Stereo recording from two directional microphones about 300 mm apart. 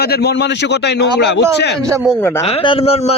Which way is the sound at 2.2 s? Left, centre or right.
Centre.